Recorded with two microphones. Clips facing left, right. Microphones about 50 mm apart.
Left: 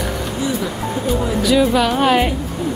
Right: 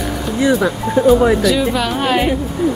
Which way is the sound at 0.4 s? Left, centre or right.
Right.